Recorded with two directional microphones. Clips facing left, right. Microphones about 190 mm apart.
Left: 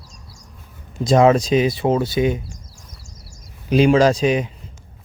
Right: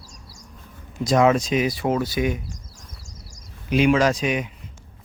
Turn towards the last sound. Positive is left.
turn(degrees=30)  # may be behind; listen again after turning